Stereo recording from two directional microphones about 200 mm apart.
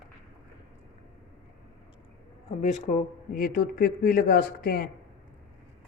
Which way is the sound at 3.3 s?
45° left (ahead or behind).